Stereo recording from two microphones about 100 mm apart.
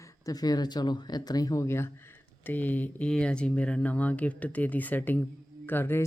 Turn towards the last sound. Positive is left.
turn(degrees=20)  # may be behind; listen again after turning